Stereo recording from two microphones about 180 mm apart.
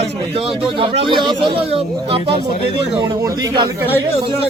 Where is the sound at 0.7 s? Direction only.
30° right (ahead or behind).